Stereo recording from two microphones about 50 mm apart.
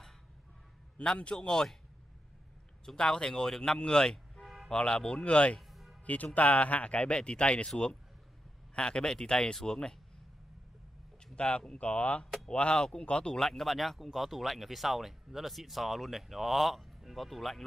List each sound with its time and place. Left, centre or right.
0.9 s a man's voice: left
2.8 s a man's voice: centre
5.7 s music: centre
6.0 s a man's voice: left; by 9.9 s centre
11.3 s a man's voice: left
13.5 s speech: centre